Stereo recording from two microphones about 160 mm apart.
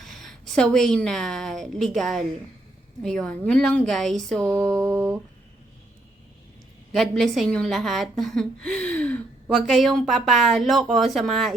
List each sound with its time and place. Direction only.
0.0 s a woman's voice: centre (ahead or behind)
4.8 s a sound: 15° right (ahead or behind)
6.9 s a woman's voice: centre (ahead or behind)